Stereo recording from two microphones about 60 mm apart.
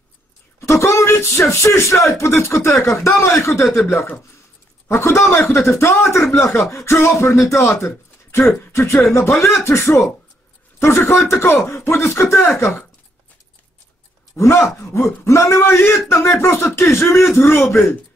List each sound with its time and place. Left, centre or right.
0.6 s a sound: left
2.1 s speech: left
3.6 s speech: centre
4.8 s a man's voice: left
14.3 s speech: left